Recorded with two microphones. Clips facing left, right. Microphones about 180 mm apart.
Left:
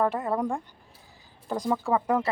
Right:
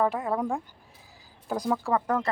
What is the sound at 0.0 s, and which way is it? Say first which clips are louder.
Speech: even; centre (ahead or behind).